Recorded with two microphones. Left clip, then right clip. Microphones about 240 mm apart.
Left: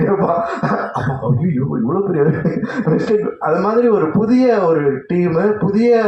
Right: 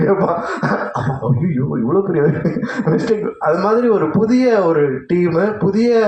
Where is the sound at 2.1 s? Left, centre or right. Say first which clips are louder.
Even; right.